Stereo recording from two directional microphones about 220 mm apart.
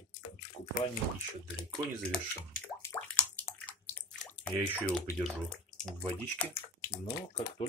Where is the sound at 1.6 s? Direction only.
5° left (ahead or behind).